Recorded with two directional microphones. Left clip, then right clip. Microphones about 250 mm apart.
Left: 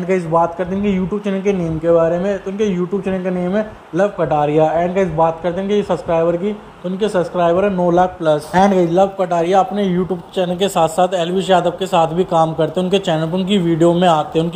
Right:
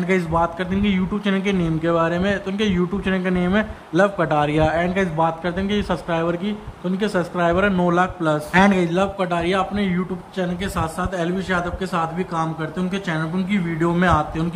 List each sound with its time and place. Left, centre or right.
0.1 s a man's voice: centre